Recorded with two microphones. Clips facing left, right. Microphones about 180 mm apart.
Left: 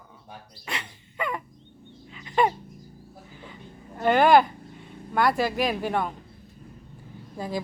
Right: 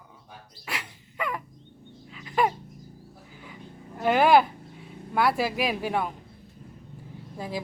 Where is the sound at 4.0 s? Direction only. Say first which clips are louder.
Left 1 dB; 5° right (ahead or behind).